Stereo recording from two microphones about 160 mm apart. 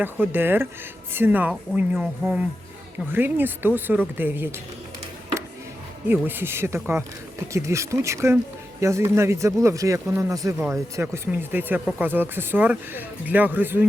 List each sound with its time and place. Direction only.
0.0 s speech: 10° right (ahead or behind)
6.1 s speech: 10° right (ahead or behind)